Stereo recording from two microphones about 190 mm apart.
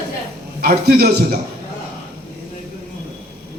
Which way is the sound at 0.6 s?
55° right (ahead or behind).